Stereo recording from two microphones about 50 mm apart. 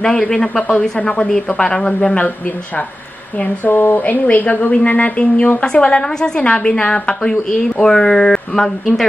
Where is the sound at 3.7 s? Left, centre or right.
Left.